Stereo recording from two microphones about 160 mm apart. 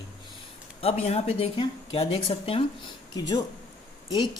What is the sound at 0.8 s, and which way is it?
Speech, 35° left (ahead or behind).